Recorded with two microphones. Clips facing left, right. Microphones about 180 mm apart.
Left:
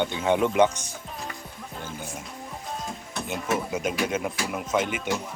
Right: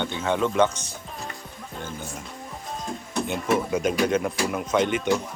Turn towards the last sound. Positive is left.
turn(degrees=5)  # may be behind; listen again after turning